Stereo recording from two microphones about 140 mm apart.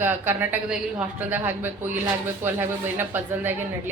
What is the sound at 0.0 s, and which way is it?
A woman's voice, 15° right (ahead or behind).